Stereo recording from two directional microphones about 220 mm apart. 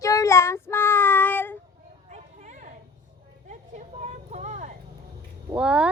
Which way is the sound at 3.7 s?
30° right (ahead or behind).